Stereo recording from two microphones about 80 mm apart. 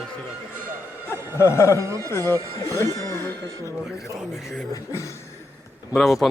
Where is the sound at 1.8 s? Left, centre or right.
Right.